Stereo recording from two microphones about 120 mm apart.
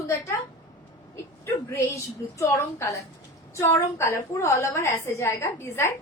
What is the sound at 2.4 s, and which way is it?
A woman's voice, 20° left (ahead or behind).